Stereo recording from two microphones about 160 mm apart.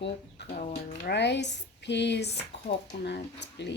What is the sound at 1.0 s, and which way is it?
Speech, 90° left.